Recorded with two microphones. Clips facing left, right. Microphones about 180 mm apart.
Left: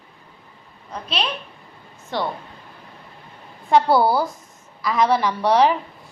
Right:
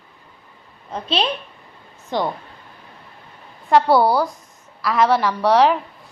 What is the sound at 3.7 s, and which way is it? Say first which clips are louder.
A child's voice: right 1 dB; centre (ahead or behind).